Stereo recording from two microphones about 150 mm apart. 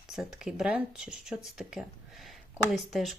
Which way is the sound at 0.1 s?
5° right (ahead or behind).